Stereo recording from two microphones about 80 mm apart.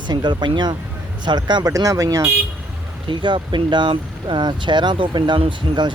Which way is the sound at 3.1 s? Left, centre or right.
Right.